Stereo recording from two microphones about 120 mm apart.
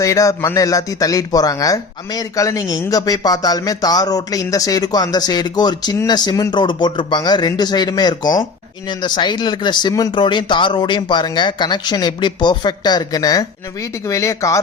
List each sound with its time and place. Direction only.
0.0 s speech: 25° left (ahead or behind)